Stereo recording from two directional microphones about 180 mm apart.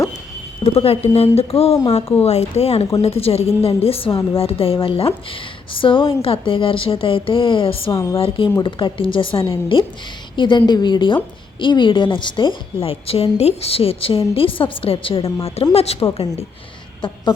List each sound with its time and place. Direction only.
0.6 s a woman's voice: 35° left (ahead or behind)